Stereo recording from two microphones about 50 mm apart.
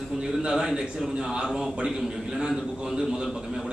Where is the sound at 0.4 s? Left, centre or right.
Centre.